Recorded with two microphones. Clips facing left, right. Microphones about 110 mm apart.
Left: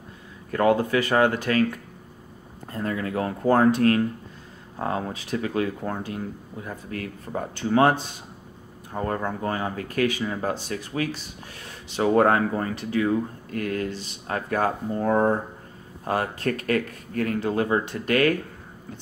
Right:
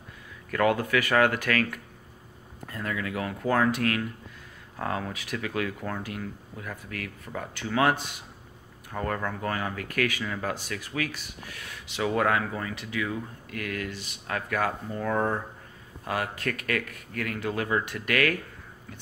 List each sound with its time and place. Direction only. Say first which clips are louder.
0.5 s speech: left 4 dB; 30° left (ahead or behind)